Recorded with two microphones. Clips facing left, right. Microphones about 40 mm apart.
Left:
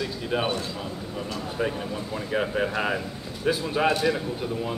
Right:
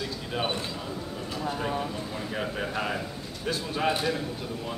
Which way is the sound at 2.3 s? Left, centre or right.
Centre.